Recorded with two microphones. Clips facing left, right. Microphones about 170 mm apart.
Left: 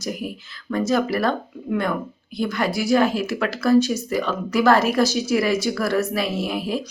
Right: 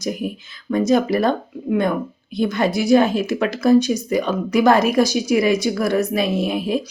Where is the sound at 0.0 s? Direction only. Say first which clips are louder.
Right 4 dB; 20° right (ahead or behind).